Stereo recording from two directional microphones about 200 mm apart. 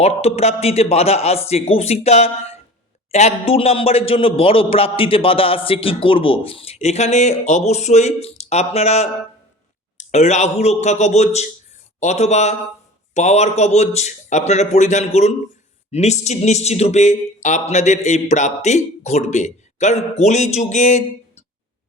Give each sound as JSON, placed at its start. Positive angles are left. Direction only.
{"t": 0.0, "sound": "a man's voice", "side_deg": 30}